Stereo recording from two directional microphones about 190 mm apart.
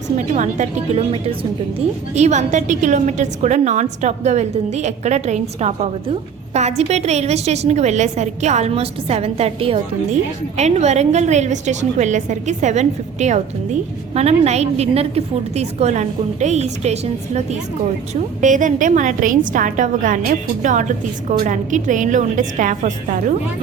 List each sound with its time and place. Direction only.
0.2 s a woman's voice: 40° right (ahead or behind)